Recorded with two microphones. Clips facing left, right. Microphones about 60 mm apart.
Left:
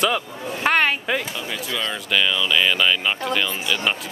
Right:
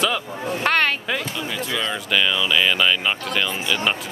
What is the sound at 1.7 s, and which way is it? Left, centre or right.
Speech, centre.